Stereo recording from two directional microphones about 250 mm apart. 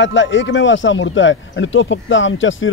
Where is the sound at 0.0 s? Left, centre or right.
Left.